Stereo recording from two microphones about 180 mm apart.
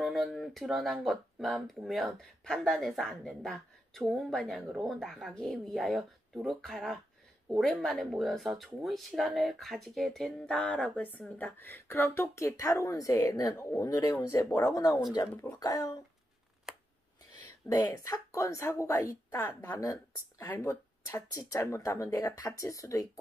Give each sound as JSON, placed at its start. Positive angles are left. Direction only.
{"t": 0.0, "sound": "speech", "side_deg": 0}
{"t": 16.7, "sound": "a sound", "side_deg": -5}
{"t": 17.6, "sound": "a woman's voice", "side_deg": 20}